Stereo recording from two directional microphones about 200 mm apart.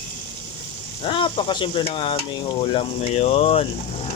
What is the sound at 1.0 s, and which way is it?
Stir, 25° left (ahead or behind).